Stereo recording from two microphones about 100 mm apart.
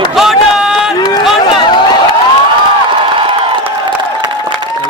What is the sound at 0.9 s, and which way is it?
Speech, 40° left (ahead or behind).